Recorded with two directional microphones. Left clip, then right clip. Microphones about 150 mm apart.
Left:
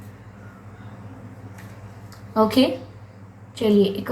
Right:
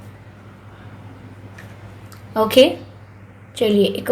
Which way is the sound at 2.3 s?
40° right (ahead or behind).